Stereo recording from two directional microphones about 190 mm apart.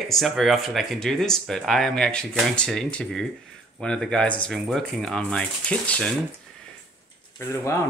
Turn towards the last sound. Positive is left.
turn(degrees=15)  # may be behind; listen again after turning